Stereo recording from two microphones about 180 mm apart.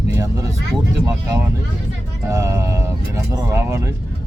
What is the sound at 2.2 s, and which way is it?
Speech, 15° right (ahead or behind).